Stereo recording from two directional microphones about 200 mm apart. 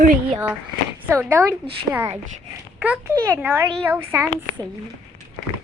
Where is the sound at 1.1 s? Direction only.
15° right (ahead or behind).